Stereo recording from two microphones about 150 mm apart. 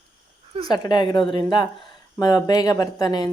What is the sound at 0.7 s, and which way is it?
A woman's voice, 30° left (ahead or behind).